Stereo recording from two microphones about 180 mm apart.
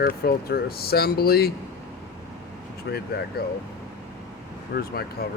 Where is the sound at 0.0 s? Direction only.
60° left (ahead or behind).